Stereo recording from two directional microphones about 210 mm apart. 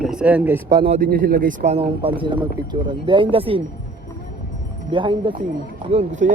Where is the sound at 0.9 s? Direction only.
40° right (ahead or behind); by 3.6 s 25° right (ahead or behind).